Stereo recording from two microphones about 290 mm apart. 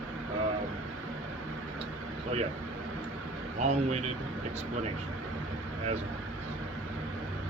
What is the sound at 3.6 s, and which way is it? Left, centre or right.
Speech, right.